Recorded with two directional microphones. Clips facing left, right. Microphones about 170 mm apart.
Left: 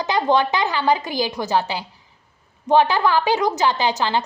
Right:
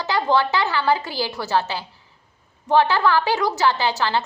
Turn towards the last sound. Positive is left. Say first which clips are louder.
# left 1 dB
turn(degrees=15)  # may be behind; listen again after turning